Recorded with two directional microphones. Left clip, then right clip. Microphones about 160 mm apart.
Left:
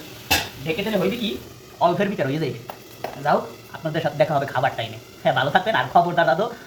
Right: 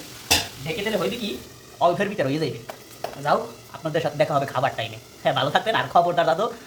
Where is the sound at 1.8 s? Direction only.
25° right (ahead or behind).